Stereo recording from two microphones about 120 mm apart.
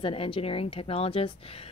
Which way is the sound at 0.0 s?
50° left (ahead or behind).